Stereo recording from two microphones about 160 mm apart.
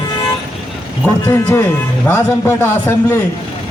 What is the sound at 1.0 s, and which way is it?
A man's voice, 15° left (ahead or behind).